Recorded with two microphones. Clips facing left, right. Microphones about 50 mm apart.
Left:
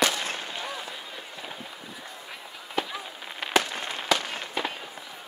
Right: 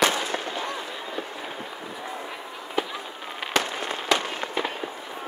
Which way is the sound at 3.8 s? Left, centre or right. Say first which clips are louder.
Right 2 dB; right.